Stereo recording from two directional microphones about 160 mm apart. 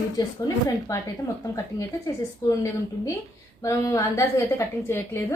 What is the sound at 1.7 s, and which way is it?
A woman's voice, 20° left (ahead or behind).